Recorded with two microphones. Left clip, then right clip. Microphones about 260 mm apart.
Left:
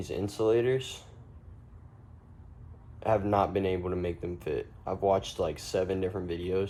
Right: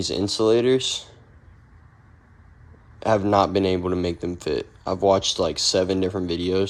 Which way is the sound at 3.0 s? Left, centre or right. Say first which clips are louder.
Right 8 dB; right.